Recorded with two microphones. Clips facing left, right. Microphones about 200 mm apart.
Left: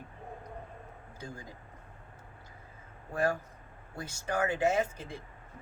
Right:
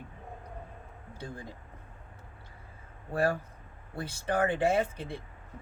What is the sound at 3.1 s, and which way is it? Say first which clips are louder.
Speech: right 2 dB; 35° right (ahead or behind).